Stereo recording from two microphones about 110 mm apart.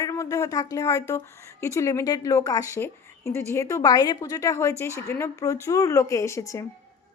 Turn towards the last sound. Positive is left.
turn(degrees=25)  # may be behind; listen again after turning